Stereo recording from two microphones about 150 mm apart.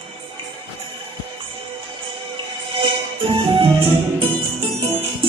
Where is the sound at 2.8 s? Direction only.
40° right (ahead or behind).